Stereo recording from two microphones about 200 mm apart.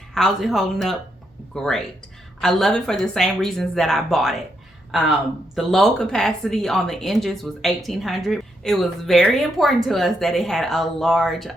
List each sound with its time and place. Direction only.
0.1 s speech: centre (ahead or behind)